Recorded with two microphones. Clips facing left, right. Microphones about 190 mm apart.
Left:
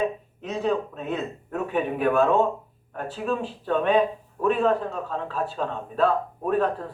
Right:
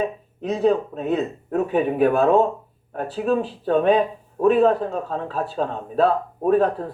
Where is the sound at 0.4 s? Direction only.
35° right (ahead or behind).